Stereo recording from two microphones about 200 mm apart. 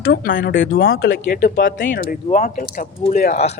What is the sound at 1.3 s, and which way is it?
Speech, 40° left (ahead or behind).